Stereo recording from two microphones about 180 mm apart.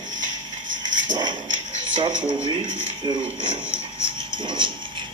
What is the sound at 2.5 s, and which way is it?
Speech, 25° right (ahead or behind).